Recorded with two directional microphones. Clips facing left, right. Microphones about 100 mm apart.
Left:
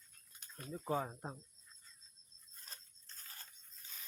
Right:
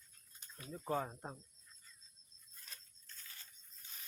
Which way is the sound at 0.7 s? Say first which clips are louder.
Left 1 dB; 5° left (ahead or behind).